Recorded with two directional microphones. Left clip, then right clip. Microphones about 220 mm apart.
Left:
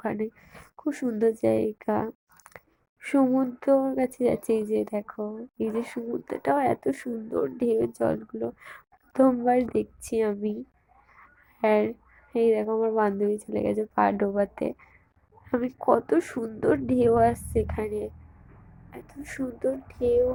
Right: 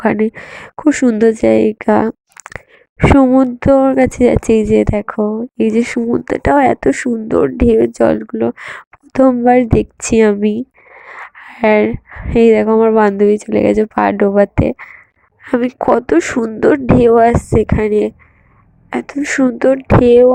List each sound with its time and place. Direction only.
0.0 s speech: 40° right (ahead or behind)